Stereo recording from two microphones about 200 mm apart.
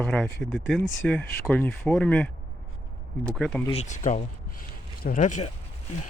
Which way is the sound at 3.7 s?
35° left (ahead or behind).